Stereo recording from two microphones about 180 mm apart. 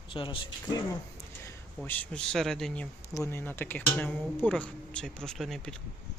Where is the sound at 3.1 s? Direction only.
15° left (ahead or behind).